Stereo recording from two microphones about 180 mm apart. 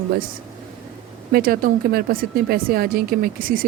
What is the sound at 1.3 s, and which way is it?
Speech, 55° right (ahead or behind).